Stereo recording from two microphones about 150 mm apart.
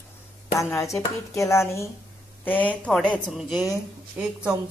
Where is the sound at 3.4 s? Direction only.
5° right (ahead or behind).